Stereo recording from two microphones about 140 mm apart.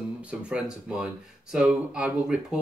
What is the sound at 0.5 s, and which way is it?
Speech, 5° right (ahead or behind).